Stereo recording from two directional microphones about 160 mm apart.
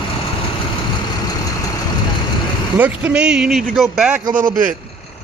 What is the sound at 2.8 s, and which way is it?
Speech, 5° right (ahead or behind).